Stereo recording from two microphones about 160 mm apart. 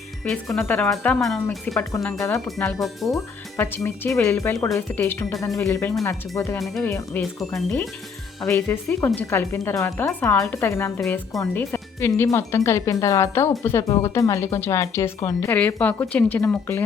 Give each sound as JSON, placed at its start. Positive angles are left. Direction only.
{"t": 0.3, "sound": "speech", "side_deg": 0}
{"t": 3.8, "sound": "speech", "side_deg": 15}
{"t": 10.6, "sound": "speech", "side_deg": 15}
{"t": 11.0, "sound": "speech", "side_deg": 0}
{"t": 11.3, "sound": "speech", "side_deg": 15}